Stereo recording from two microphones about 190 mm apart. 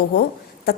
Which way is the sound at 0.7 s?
50° left (ahead or behind).